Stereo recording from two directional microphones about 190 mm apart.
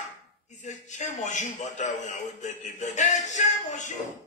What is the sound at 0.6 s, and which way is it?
A man's voice, 40° left (ahead or behind).